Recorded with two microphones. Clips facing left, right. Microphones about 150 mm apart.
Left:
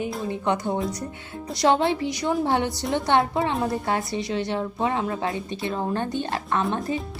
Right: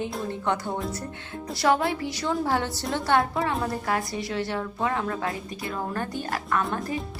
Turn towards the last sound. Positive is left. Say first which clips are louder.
# left 2 dB
turn(degrees=25)  # may be behind; listen again after turning